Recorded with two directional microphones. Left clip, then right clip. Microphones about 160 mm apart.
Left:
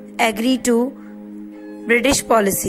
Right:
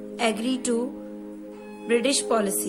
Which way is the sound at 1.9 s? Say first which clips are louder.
Left 7 dB; 45° left (ahead or behind).